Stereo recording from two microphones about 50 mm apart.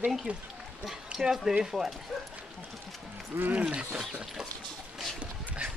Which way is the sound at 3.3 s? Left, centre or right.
Right.